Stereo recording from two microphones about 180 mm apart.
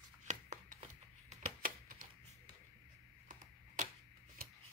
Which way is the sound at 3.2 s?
45° right (ahead or behind).